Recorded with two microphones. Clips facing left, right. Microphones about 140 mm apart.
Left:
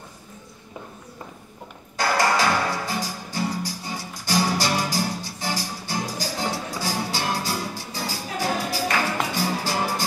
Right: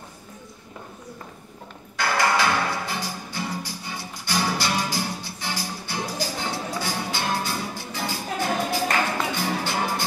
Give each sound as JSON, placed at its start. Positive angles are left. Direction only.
{"t": 2.0, "sound": "music", "side_deg": 40}